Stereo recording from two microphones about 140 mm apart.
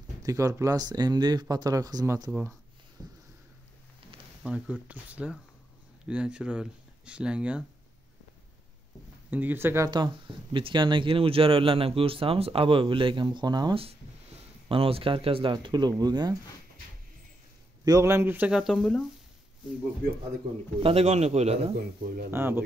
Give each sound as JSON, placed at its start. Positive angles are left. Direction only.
{"t": 0.2, "sound": "speech", "side_deg": -25}
{"t": 4.4, "sound": "speech", "side_deg": -5}
{"t": 9.3, "sound": "speech", "side_deg": -15}
{"t": 9.8, "sound": "speech", "side_deg": -35}
{"t": 14.7, "sound": "speech", "side_deg": -40}
{"t": 17.8, "sound": "speech", "side_deg": -20}
{"t": 18.6, "sound": "speech", "side_deg": 0}
{"t": 20.8, "sound": "a man's voice", "side_deg": -45}
{"t": 22.3, "sound": "speech", "side_deg": -15}